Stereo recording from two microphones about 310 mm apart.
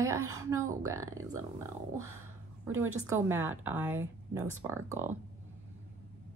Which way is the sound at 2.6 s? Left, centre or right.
Centre.